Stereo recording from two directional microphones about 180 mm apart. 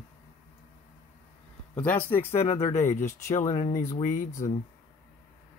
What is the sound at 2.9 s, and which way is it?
Speech, 40° left (ahead or behind).